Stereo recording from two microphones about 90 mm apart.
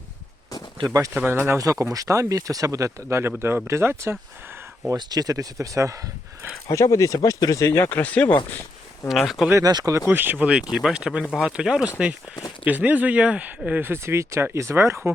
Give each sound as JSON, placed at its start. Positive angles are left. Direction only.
{"t": 0.8, "sound": "speech", "side_deg": -70}
{"t": 1.1, "sound": "speech", "side_deg": -20}
{"t": 1.5, "sound": "speech", "side_deg": -35}
{"t": 4.9, "sound": "speech", "side_deg": -45}
{"t": 6.7, "sound": "speech", "side_deg": 35}
{"t": 7.9, "sound": "speech", "side_deg": 20}
{"t": 9.0, "sound": "speech", "side_deg": 0}
{"t": 9.5, "sound": "speech", "side_deg": -35}
{"t": 10.1, "sound": "speech", "side_deg": -20}
{"t": 11.2, "sound": "speech", "side_deg": 5}
{"t": 11.4, "sound": "speech", "side_deg": -5}